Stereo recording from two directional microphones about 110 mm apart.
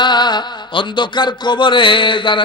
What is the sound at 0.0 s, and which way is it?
A man's voice, 40° left (ahead or behind).